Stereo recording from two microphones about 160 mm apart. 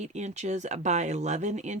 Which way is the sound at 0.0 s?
45° right (ahead or behind).